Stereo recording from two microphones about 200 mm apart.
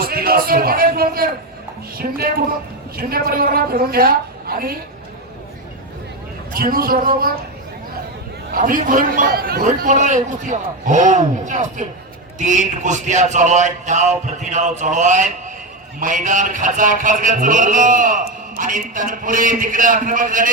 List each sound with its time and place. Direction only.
0.0 s a man's voice: 50° right (ahead or behind)
6.5 s a woman's voice: 45° right (ahead or behind)
8.5 s music: 45° right (ahead or behind)